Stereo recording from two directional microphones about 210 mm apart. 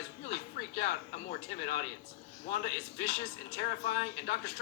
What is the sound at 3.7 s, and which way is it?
Speech, 45° left (ahead or behind).